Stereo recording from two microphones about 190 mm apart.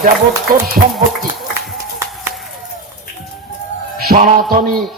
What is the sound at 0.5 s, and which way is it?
Music, 50° right (ahead or behind).